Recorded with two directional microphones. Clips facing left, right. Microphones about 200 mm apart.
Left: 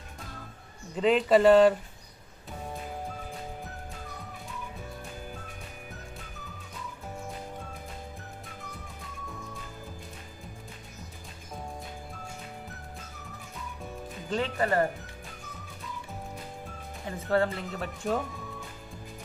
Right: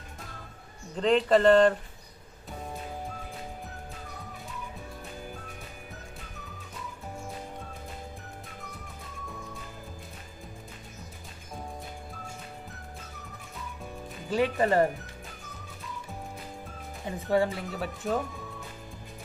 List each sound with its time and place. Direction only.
0.9 s speech: 5° left (ahead or behind)
14.3 s speech: 15° right (ahead or behind)
17.3 s speech: 10° right (ahead or behind)
17.6 s speech: centre (ahead or behind)